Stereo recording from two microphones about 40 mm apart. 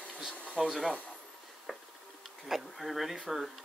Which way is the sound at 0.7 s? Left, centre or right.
Centre.